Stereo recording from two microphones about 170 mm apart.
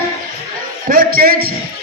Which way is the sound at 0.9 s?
60° right (ahead or behind).